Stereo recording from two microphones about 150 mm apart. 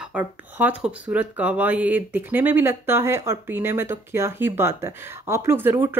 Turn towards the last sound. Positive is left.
turn(degrees=-15)  # may be behind; listen again after turning